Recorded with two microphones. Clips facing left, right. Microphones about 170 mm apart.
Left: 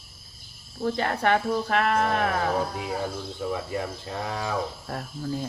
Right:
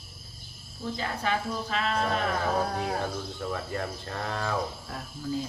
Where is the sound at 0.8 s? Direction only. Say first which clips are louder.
Left 7 dB; 65° left (ahead or behind).